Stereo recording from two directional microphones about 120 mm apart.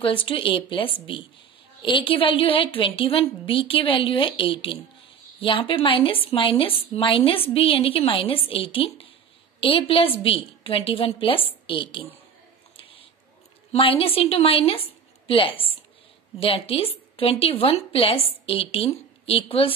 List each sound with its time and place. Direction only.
0.0 s a woman's voice: 45° left (ahead or behind)
12.7 s a sound: 50° left (ahead or behind)
13.7 s a woman's voice: 50° left (ahead or behind)